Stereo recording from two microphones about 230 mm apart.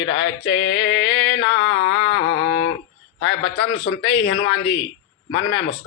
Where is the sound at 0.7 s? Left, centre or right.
Centre.